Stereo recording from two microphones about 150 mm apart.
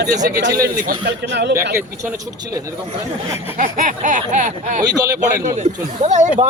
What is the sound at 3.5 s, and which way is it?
Speech, 60° right (ahead or behind).